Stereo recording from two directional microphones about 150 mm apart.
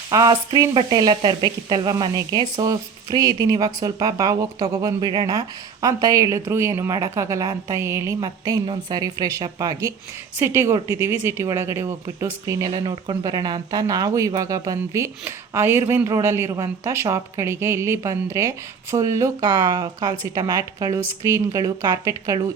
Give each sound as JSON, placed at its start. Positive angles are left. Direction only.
{"t": 0.1, "sound": "speech", "side_deg": -25}